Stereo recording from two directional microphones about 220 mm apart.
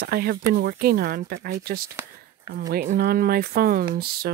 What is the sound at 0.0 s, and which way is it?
Speech, 45° right (ahead or behind).